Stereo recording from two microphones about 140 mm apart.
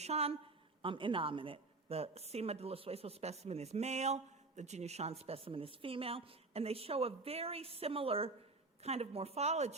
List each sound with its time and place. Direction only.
0.0 s a woman's voice: 50° right (ahead or behind)
0.8 s a woman's voice: 40° right (ahead or behind)